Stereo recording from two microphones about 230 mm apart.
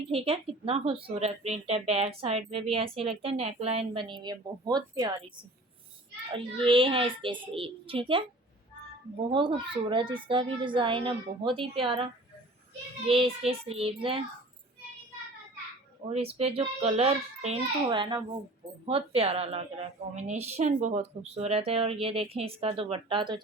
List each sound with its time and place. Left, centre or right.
0.1 s a woman's voice: right
6.3 s a woman's voice: right
9.3 s a woman's voice: right
16.0 s a woman's voice: right